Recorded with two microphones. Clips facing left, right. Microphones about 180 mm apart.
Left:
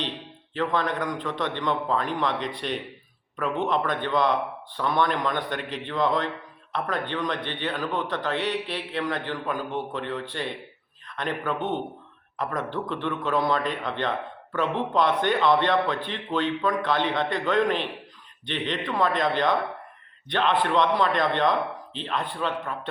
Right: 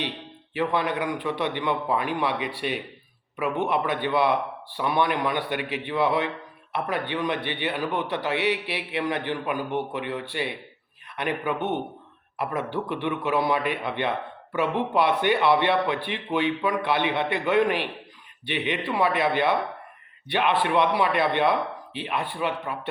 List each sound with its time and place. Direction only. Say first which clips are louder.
0.5 s a man's voice: right 1 dB; 10° right (ahead or behind)